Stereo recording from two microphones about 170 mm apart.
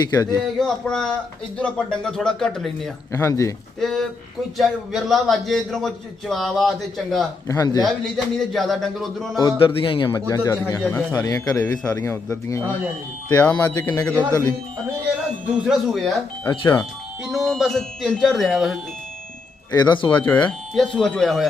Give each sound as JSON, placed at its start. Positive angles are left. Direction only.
{"t": 0.0, "sound": "a man's voice", "side_deg": 20}
{"t": 0.6, "sound": "a man's voice", "side_deg": 5}
{"t": 3.1, "sound": "speech", "side_deg": 15}
{"t": 3.8, "sound": "a man's voice", "side_deg": 0}
{"t": 7.4, "sound": "a man's voice", "side_deg": 20}
{"t": 7.8, "sound": "a man's voice", "side_deg": 0}
{"t": 9.4, "sound": "a man's voice", "side_deg": 25}
{"t": 15.6, "sound": "a man's voice", "side_deg": 0}
{"t": 16.5, "sound": "a man's voice", "side_deg": 25}
{"t": 17.2, "sound": "a man's voice", "side_deg": 0}
{"t": 19.7, "sound": "a man's voice", "side_deg": 25}
{"t": 20.2, "sound": "a man's voice", "side_deg": 10}